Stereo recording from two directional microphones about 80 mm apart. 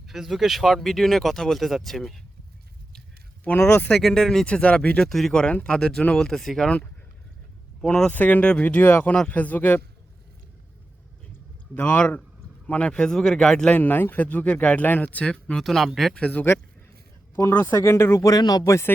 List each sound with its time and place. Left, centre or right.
0.0 s speech: centre
3.4 s speech: left
3.9 s speech: centre
5.0 s speech: centre
7.9 s speech: centre
8.1 s speech: left
9.1 s speech: centre
11.7 s speech: centre
13.7 s speech: left
15.6 s speech: centre
16.2 s speech: centre; by 18.6 s left
18.6 s speech: left